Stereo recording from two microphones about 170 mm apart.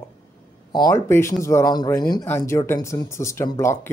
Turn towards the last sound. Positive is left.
turn(degrees=15)  # may be behind; listen again after turning